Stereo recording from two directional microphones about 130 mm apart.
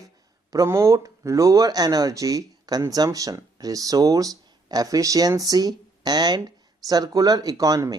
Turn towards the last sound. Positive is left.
turn(degrees=-25)  # may be behind; listen again after turning